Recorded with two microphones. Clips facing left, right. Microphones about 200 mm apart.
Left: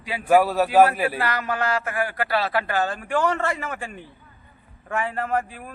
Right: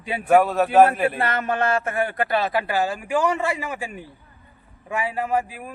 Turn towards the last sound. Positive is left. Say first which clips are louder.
# right 2 dB
turn(degrees=-5)  # may be behind; listen again after turning